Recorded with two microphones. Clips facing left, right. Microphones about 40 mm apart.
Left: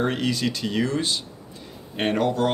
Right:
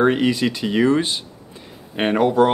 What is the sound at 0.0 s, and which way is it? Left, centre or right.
Speech, centre.